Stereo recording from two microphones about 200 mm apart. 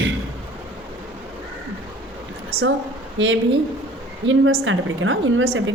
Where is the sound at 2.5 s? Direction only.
90° right.